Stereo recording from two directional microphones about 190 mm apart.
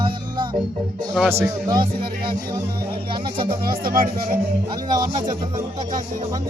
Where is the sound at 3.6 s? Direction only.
50° right (ahead or behind).